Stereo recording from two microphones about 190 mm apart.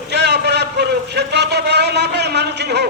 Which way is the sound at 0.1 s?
60° right (ahead or behind).